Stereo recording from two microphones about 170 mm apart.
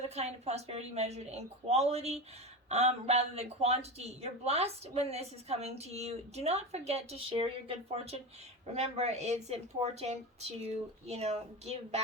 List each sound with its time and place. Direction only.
0.0 s speech: 40° right (ahead or behind)